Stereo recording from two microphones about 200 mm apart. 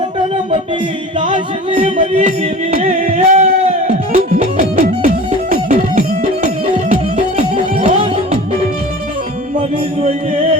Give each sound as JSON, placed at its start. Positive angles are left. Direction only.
{"t": 1.2, "sound": "music", "side_deg": -35}
{"t": 9.6, "sound": "music", "side_deg": -30}